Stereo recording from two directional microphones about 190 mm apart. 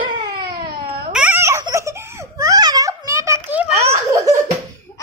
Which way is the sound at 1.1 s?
10° right (ahead or behind).